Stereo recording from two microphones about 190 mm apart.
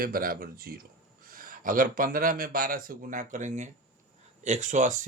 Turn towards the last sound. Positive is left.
turn(degrees=-40)  # may be behind; listen again after turning